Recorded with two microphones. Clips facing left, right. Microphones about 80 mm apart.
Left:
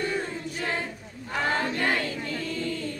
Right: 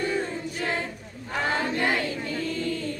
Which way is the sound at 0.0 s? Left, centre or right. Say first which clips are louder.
Right 2 dB; centre.